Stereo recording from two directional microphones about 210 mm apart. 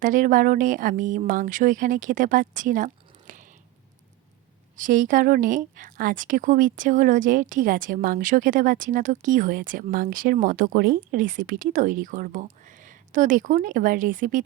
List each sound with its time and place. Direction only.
0.0 s speech: 40° right (ahead or behind)
4.8 s speech: 40° right (ahead or behind)